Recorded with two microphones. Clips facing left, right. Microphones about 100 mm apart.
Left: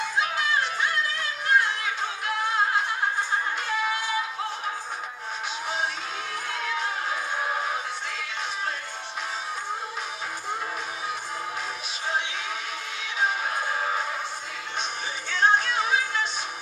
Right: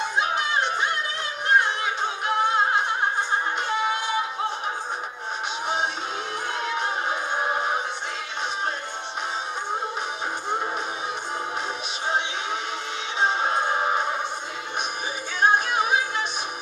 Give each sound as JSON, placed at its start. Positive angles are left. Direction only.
{"t": 0.0, "sound": "music", "side_deg": -25}
{"t": 6.6, "sound": "music", "side_deg": -25}
{"t": 13.2, "sound": "music", "side_deg": -25}
{"t": 15.4, "sound": "music", "side_deg": -15}